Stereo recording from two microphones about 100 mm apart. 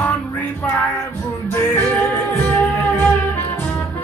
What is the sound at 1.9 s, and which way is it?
Music, 15° left (ahead or behind).